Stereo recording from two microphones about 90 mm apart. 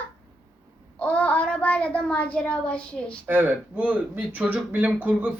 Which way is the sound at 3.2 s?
20° right (ahead or behind).